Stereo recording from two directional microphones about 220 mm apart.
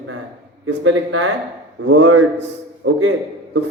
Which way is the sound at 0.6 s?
65° right (ahead or behind).